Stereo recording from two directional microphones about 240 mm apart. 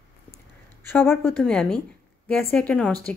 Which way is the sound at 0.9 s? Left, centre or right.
Centre.